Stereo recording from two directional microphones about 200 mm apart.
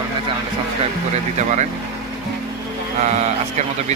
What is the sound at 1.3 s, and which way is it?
Speech, 35° right (ahead or behind).